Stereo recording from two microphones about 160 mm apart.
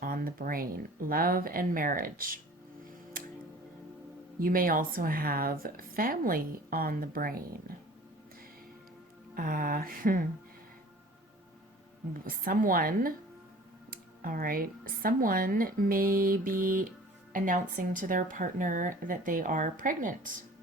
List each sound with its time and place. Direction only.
0.0 s speech: 65° right (ahead or behind)
4.4 s speech: 60° right (ahead or behind)
9.3 s speech: 60° right (ahead or behind)
12.2 s speech: 60° right (ahead or behind)